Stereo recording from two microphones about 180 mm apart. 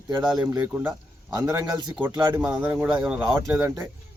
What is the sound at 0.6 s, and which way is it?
A man's voice, 10° right (ahead or behind).